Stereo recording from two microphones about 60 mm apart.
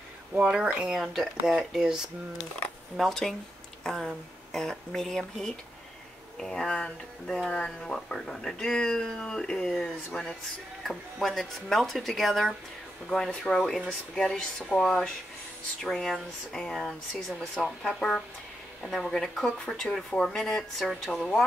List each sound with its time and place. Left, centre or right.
0.4 s speech: centre
0.9 s speech: centre
3.0 s speech: centre
10.8 s speech: centre